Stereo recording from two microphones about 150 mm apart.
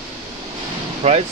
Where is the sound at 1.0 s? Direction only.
45° right (ahead or behind).